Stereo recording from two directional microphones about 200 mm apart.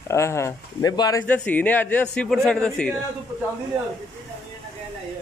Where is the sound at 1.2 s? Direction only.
10° left (ahead or behind).